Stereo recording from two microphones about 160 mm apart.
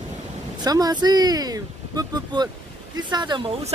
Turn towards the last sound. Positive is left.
turn(degrees=-30)  # may be behind; listen again after turning